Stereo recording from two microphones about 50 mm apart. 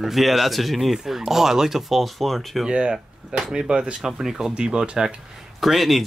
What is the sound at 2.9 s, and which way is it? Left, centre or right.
Speech, centre.